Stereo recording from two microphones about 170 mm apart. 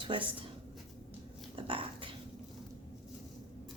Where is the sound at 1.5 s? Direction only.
30° right (ahead or behind).